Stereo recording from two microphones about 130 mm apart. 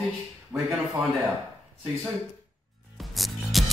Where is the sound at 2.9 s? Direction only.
Centre (ahead or behind).